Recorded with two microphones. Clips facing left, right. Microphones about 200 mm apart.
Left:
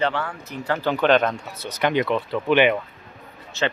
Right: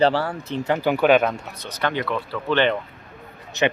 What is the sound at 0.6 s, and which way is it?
Speech, 15° right (ahead or behind).